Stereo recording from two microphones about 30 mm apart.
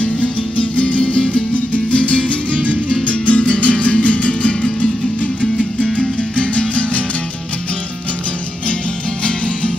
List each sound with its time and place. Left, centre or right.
0.0 s music: left